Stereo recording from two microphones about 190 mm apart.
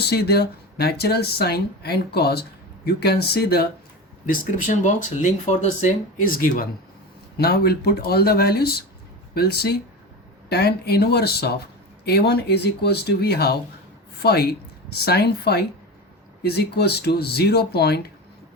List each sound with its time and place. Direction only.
0.1 s speech: 55° left (ahead or behind)
4.3 s speech: 45° left (ahead or behind)